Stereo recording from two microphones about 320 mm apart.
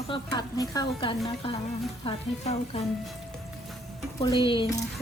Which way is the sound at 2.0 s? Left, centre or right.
Centre.